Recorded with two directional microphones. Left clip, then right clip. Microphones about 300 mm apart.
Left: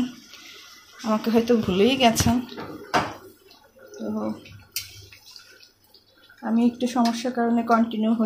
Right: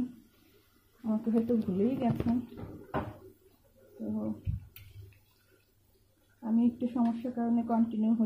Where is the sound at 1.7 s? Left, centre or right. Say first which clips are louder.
Left 12 dB; left.